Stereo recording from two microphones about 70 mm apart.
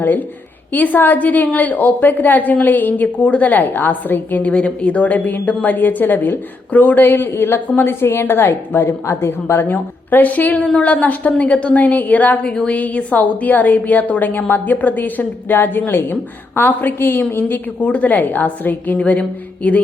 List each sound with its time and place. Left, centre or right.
0.7 s a woman's voice: left